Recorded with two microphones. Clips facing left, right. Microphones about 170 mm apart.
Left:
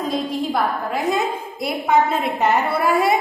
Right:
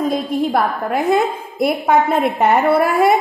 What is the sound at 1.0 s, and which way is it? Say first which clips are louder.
A woman's voice: right 5 dB; 55° right (ahead or behind).